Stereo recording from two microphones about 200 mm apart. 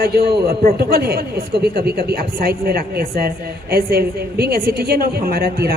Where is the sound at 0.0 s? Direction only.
50° right (ahead or behind).